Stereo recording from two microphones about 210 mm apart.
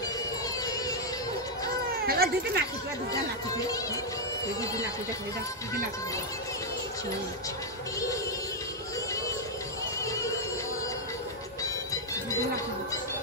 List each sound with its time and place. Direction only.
2.0 s speech: 45° right (ahead or behind)
3.1 s speech: 15° left (ahead or behind)
10.0 s music: 15° left (ahead or behind)